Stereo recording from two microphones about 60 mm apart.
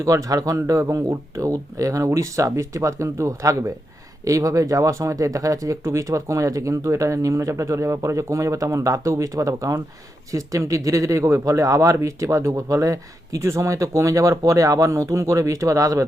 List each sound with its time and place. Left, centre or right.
0.0 s speech: right
5.8 s speech: right